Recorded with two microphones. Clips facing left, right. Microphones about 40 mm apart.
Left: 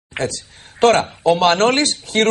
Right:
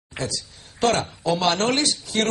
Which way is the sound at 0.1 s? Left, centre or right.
Left.